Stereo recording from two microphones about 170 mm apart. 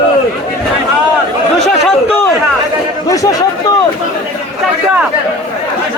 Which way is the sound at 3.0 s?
20° left (ahead or behind).